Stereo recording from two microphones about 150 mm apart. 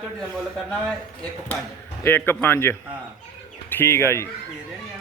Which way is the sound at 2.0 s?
15° left (ahead or behind).